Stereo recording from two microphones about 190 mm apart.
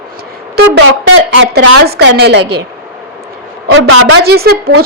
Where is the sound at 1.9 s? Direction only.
60° right (ahead or behind).